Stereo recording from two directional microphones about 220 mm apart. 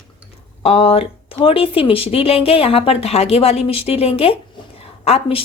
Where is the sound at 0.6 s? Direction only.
25° left (ahead or behind).